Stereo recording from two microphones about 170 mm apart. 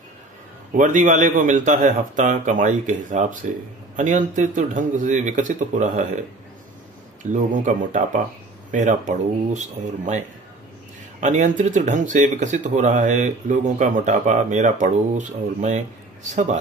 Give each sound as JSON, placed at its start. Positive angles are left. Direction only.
{"t": 0.7, "sound": "speech", "side_deg": -50}
{"t": 7.2, "sound": "speech", "side_deg": -45}